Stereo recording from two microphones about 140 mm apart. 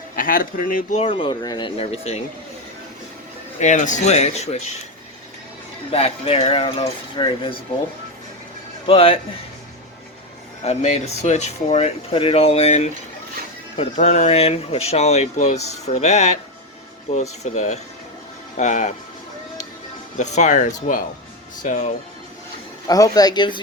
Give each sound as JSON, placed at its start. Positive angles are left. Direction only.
{"t": 0.2, "sound": "speech", "side_deg": 85}
{"t": 0.9, "sound": "speech", "side_deg": 40}
{"t": 1.8, "sound": "speech", "side_deg": 50}
{"t": 3.6, "sound": "speech", "side_deg": 60}
{"t": 5.9, "sound": "speech", "side_deg": 45}
{"t": 8.9, "sound": "speech", "side_deg": 40}
{"t": 10.6, "sound": "speech", "side_deg": 50}
{"t": 13.9, "sound": "speech", "side_deg": 55}
{"t": 20.1, "sound": "speech", "side_deg": 60}
{"t": 22.9, "sound": "speech", "side_deg": 25}